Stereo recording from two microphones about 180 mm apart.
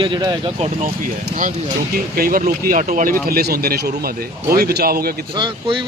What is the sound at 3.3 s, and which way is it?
Speech, 60° right (ahead or behind).